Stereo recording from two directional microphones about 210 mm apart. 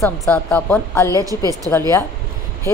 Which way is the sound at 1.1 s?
15° right (ahead or behind).